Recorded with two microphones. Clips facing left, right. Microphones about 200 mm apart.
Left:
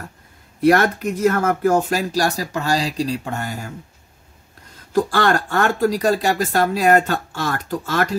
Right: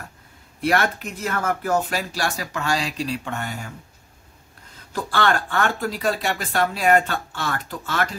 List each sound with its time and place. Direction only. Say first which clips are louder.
0.6 s speech: left 7 dB; 45° left (ahead or behind)
4.9 s speech: left 5 dB; 40° left (ahead or behind)